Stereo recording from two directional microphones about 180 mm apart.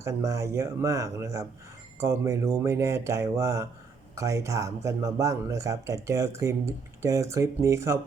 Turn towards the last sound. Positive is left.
turn(degrees=-15)  # may be behind; listen again after turning